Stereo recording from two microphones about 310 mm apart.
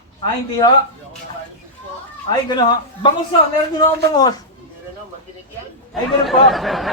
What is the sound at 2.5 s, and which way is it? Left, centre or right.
Speech, centre.